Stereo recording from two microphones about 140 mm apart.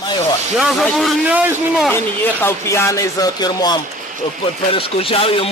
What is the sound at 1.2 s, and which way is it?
Speech, 10° right (ahead or behind).